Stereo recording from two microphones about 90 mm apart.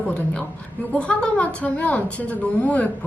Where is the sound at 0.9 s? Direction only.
15° left (ahead or behind).